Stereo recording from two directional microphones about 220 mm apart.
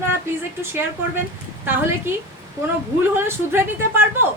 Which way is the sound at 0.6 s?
10° right (ahead or behind).